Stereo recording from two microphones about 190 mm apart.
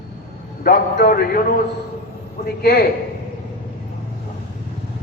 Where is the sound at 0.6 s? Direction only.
55° left (ahead or behind).